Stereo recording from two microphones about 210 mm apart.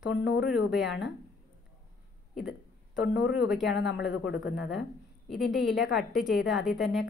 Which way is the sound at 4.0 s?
55° left (ahead or behind).